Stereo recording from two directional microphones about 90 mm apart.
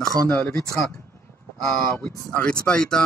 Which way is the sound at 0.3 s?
25° left (ahead or behind).